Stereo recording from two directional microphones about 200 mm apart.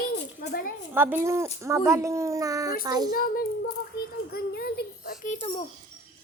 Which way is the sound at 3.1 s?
45° left (ahead or behind).